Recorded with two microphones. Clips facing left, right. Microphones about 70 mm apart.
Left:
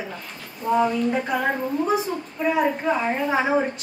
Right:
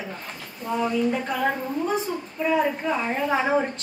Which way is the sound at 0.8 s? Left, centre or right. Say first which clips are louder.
Left 2 dB; centre.